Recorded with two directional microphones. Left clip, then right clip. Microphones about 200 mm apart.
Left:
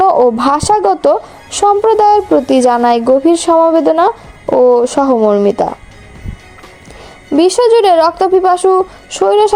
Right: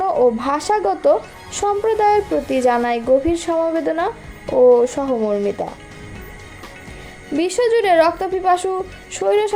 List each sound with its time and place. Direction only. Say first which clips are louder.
0.0 s speech: left 8 dB; 35° left (ahead or behind)
7.3 s speech: left 9 dB; 35° left (ahead or behind)